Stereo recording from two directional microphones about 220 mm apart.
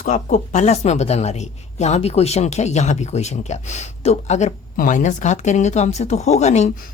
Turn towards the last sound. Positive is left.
turn(degrees=30)  # may be behind; listen again after turning